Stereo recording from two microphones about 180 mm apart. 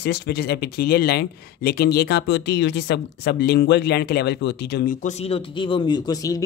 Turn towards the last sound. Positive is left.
turn(degrees=20)  # may be behind; listen again after turning